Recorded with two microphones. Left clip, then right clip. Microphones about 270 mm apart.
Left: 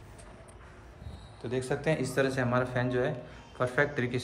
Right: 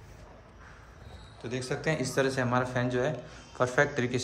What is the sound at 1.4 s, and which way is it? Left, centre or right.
A man's voice, centre.